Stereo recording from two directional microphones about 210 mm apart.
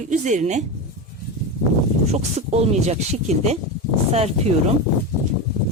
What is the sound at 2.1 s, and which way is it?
Speech, 30° right (ahead or behind).